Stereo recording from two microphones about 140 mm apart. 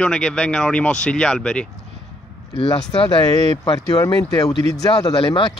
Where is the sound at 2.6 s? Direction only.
40° left (ahead or behind).